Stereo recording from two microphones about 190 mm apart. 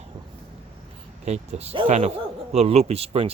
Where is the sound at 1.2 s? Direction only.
35° right (ahead or behind).